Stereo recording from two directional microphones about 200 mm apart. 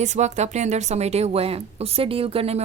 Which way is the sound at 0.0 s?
35° right (ahead or behind).